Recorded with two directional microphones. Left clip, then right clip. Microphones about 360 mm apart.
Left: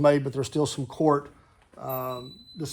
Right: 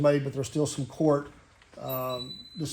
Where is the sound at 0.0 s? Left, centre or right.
Left.